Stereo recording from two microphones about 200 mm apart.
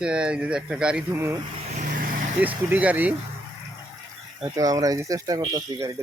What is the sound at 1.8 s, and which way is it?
Vehicle, 45° right (ahead or behind).